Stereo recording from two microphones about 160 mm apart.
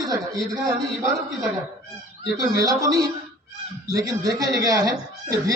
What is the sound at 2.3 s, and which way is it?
Speech, 20° right (ahead or behind).